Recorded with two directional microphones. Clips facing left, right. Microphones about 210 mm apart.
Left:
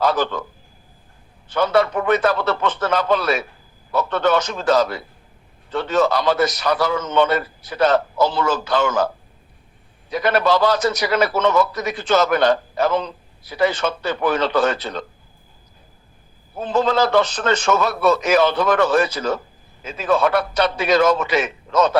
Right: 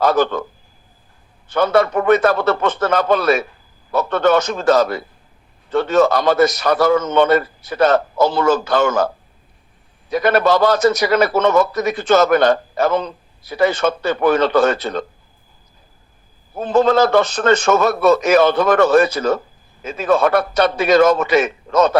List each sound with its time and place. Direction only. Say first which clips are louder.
0.0 s a man's voice: right 4 dB; 50° right (ahead or behind)
1.5 s a man's voice: right 3 dB; 50° right (ahead or behind)
10.1 s a man's voice: right 3 dB; 50° right (ahead or behind)
16.6 s a man's voice: right 5 dB; 45° right (ahead or behind)